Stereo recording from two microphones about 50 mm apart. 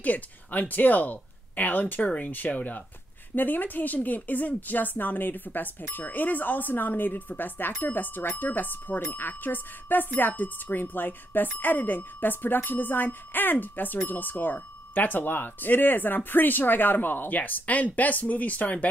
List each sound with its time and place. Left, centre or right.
0.0 s a woman's voice: left